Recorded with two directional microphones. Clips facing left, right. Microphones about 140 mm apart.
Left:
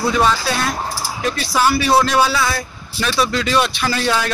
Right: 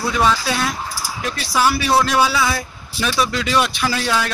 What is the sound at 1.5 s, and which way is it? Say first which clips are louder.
Speech: left 1 dB; 5° right (ahead or behind).